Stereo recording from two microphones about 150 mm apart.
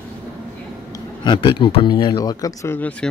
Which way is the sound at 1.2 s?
30° left (ahead or behind).